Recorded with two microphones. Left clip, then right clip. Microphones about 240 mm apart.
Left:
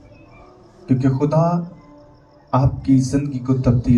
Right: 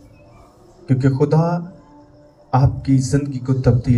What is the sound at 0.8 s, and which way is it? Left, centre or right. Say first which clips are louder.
A man's voice: right 1 dB; right.